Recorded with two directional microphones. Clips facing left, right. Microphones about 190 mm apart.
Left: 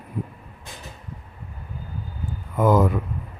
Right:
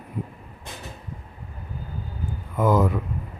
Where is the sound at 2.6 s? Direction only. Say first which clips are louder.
Left 2 dB; 50° left (ahead or behind).